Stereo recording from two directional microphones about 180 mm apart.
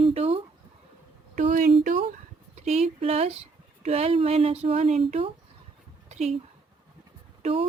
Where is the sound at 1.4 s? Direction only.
45° right (ahead or behind).